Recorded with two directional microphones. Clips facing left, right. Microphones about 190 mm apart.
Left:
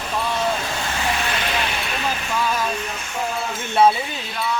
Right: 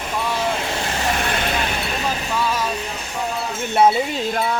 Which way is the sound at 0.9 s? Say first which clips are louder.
Right 1 dB; 45° right (ahead or behind).